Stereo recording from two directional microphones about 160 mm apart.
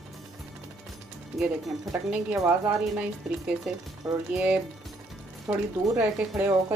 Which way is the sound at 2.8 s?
5° right (ahead or behind).